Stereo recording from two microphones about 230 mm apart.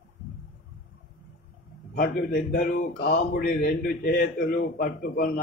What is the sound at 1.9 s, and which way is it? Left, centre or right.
A man's voice, left.